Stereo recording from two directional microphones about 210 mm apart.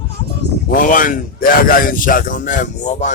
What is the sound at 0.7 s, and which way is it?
A man's voice, 40° left (ahead or behind).